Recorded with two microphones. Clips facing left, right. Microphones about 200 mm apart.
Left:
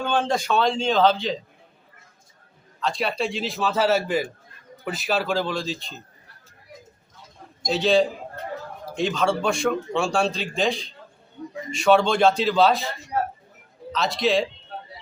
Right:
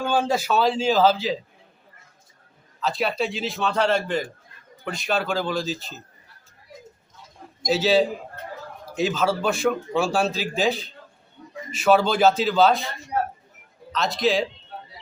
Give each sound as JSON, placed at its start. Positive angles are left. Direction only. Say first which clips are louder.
{"t": 0.0, "sound": "a man's voice", "louder": "right 1 dB", "side_deg": -5}
{"t": 2.8, "sound": "a man's voice", "louder": "right 1 dB", "side_deg": 0}
{"t": 7.6, "sound": "a man's voice", "louder": "even", "side_deg": -5}
{"t": 13.9, "sound": "a man's voice", "louder": "even", "side_deg": 0}